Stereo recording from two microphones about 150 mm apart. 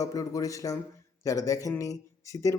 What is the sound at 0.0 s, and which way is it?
Speech, 20° left (ahead or behind).